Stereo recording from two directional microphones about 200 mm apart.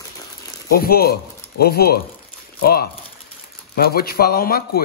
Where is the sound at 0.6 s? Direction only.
50° left (ahead or behind).